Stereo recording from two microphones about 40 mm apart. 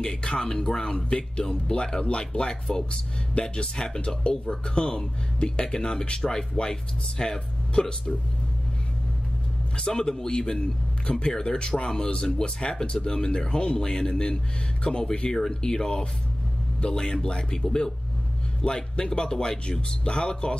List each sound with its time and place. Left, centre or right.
0.0 s a man's voice: centre
9.8 s a man's voice: centre